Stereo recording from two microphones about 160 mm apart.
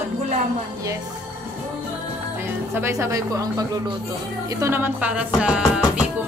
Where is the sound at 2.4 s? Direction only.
15° right (ahead or behind).